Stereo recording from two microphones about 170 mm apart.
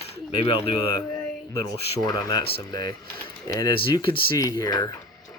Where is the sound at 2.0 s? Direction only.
25° left (ahead or behind).